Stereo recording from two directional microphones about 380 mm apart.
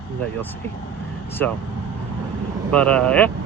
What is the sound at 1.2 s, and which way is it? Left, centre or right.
Speech, centre.